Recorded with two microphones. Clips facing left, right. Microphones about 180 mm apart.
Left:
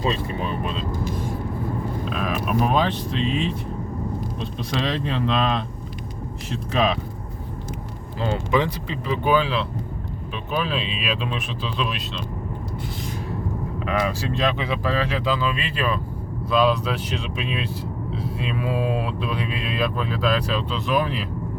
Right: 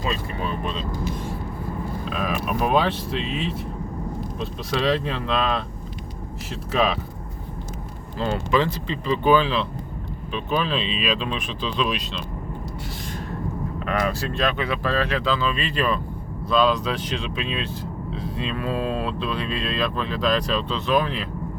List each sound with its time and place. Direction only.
0.0 s speech: 25° left (ahead or behind)
2.0 s speech: centre (ahead or behind)
8.2 s speech: 15° left (ahead or behind)
14.3 s speech: 20° left (ahead or behind)